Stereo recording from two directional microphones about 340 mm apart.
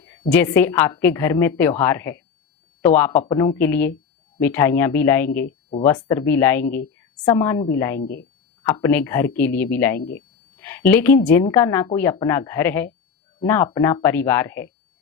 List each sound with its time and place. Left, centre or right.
0.3 s a woman's voice: centre
8.0 s speech: left
8.6 s a woman's voice: centre